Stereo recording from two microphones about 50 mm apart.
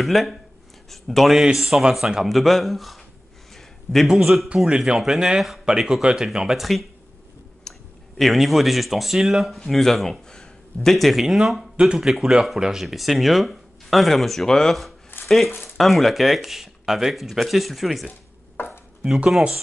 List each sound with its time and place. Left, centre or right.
0.0 s a man's voice: centre
3.5 s a sound: centre
4.1 s speech: centre
4.6 s speech: centre
6.6 s speech: centre
7.7 s clicking: centre
8.2 s speech: centre
18.6 s chopping: left